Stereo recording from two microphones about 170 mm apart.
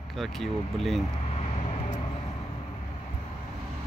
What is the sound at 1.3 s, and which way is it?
Vehicle, 40° left (ahead or behind).